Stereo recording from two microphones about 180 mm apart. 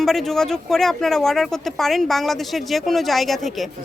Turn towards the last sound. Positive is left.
turn(degrees=0)  # may be behind; listen again after turning